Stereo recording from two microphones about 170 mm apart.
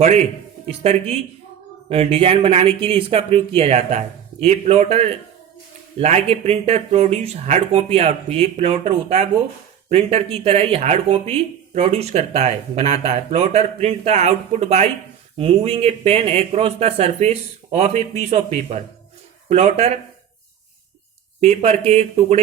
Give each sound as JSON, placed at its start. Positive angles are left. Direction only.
{"t": 0.7, "sound": "speech", "side_deg": -35}
{"t": 21.4, "sound": "speech", "side_deg": -40}